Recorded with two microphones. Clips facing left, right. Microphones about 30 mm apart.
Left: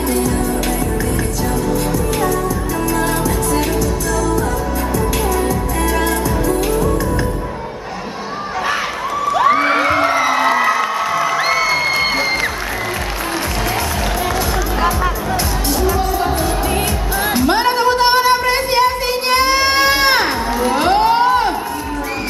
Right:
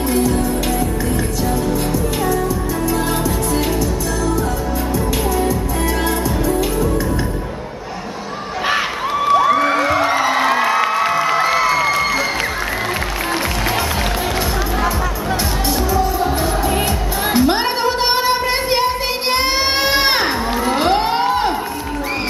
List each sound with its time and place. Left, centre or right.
9.6 s music: left
10.3 s music: right
15.8 s music: left
17.5 s music: centre
19.4 s a sound: centre
20.1 s music: centre
21.1 s a sound: centre